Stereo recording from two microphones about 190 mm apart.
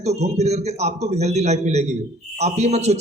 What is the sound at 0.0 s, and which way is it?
Speech, 35° right (ahead or behind).